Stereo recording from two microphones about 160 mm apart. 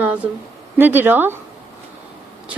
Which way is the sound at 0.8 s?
10° right (ahead or behind).